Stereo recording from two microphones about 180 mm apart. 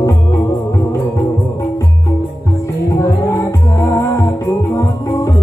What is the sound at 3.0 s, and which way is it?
Music, 15° left (ahead or behind).